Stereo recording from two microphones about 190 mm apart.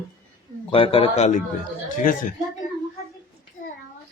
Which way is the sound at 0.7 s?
30° left (ahead or behind).